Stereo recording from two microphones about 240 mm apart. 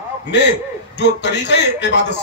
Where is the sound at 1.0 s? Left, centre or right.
Left.